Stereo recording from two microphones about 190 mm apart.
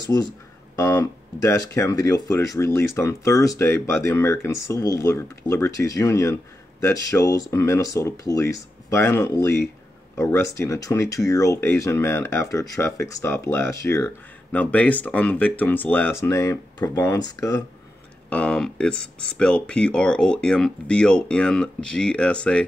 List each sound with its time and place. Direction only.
0.0 s speech: 20° left (ahead or behind)
18.3 s speech: 5° left (ahead or behind)